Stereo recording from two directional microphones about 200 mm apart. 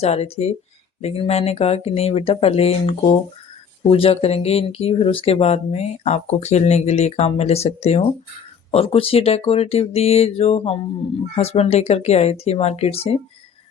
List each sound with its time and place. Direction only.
0.0 s speech: 30° left (ahead or behind)